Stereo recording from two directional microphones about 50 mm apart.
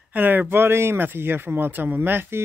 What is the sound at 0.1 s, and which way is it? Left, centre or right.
Speech, right.